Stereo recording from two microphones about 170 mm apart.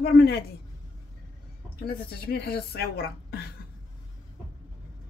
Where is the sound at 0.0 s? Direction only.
70° left (ahead or behind).